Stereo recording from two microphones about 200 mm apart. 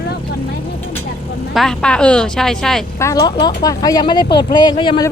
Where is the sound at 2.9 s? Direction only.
15° left (ahead or behind).